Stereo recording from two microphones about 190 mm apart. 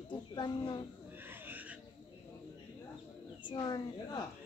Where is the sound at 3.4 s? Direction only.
25° left (ahead or behind).